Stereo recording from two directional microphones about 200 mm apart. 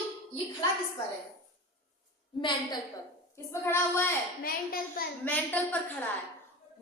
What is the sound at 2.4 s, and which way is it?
A woman's voice, 20° left (ahead or behind).